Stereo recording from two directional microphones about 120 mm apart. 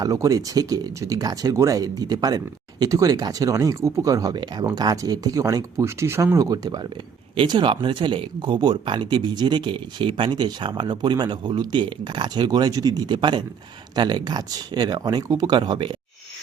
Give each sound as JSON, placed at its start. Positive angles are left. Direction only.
{"t": 0.0, "sound": "speech", "side_deg": -30}